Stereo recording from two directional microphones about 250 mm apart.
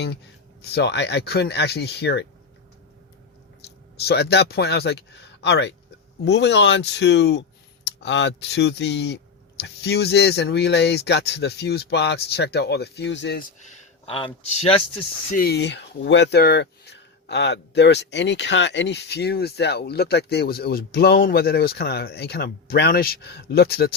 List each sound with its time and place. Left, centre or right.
0.7 s speech: left
4.0 s speech: left
13.6 s speech: left
15.4 s speech: left